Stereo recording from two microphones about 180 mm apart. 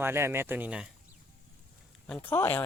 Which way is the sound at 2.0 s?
10° left (ahead or behind).